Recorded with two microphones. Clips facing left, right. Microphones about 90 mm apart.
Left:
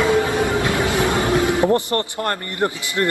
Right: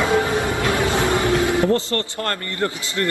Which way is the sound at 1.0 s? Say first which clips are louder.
Left 1 dB; 20° left (ahead or behind).